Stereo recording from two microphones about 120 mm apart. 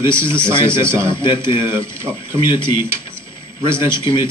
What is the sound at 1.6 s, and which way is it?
Speech, 20° right (ahead or behind).